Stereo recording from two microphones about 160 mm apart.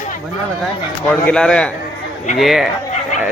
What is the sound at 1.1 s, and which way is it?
Speech, 5° left (ahead or behind).